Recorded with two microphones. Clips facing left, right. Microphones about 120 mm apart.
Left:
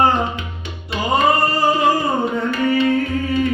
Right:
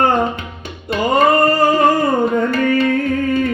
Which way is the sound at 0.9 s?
50° right (ahead or behind).